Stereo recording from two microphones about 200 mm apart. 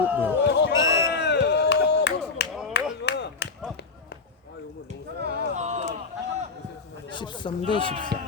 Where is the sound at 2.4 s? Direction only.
55° left (ahead or behind).